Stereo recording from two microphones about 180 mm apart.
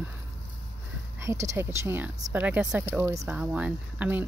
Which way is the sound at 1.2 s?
15° right (ahead or behind).